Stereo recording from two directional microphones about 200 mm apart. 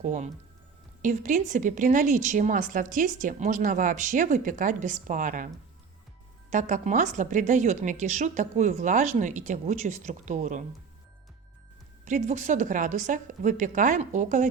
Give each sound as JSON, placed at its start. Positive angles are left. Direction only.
{"t": 0.0, "sound": "a woman's voice", "side_deg": -40}
{"t": 6.5, "sound": "a woman's voice", "side_deg": -40}
{"t": 12.0, "sound": "a woman's voice", "side_deg": -40}